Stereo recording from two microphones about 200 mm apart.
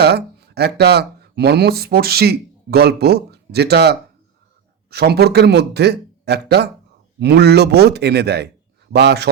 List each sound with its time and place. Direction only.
0.0 s a man's voice: 55° right (ahead or behind)